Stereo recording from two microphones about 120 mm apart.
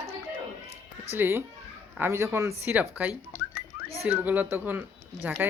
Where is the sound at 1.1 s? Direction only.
20° right (ahead or behind).